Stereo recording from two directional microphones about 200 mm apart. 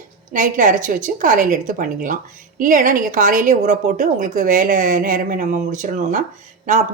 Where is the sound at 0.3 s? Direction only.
40° right (ahead or behind).